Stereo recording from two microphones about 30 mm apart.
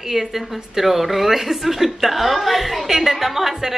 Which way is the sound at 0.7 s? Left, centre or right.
Centre.